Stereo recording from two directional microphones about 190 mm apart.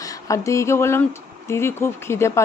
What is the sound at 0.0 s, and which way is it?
Speech, 15° left (ahead or behind).